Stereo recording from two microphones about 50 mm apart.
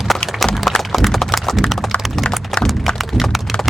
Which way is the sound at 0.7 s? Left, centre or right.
Centre.